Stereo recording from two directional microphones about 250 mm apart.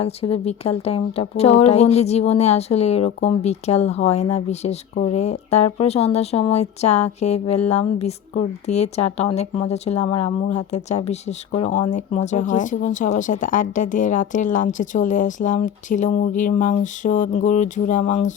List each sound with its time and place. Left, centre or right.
0.0 s speech: left